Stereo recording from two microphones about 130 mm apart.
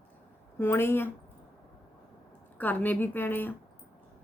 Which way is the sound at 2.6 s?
15° left (ahead or behind).